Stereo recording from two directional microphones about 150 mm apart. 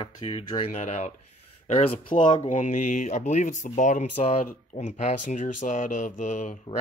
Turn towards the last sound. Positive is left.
turn(degrees=55)  # may be behind; listen again after turning